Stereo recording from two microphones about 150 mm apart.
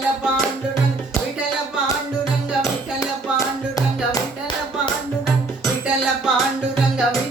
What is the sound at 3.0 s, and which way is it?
Music, 20° left (ahead or behind).